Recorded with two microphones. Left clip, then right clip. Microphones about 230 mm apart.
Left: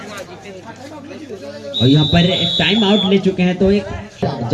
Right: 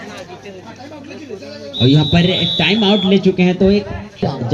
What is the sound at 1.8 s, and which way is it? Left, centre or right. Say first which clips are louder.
A man's voice: even; right.